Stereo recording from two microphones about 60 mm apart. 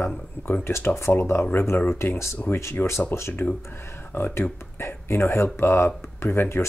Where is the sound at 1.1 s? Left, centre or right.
Left.